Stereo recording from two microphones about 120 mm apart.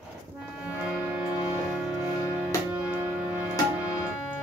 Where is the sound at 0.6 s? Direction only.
10° right (ahead or behind).